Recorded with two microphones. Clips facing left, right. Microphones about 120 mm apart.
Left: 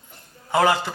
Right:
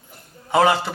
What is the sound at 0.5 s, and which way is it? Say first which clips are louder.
Speech: right 2 dB; 20° right (ahead or behind).